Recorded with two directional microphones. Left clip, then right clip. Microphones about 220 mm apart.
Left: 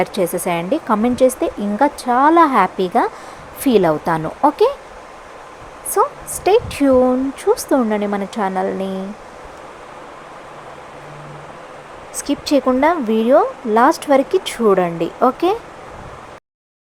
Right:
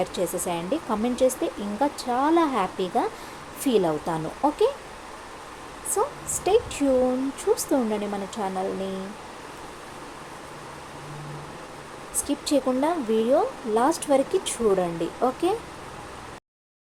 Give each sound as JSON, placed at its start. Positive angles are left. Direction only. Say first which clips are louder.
{"t": 0.0, "sound": "speech", "louder": "left 8 dB", "side_deg": 25}
{"t": 5.9, "sound": "a woman's voice", "louder": "left 9 dB", "side_deg": 25}
{"t": 12.2, "sound": "speech", "louder": "left 8 dB", "side_deg": 20}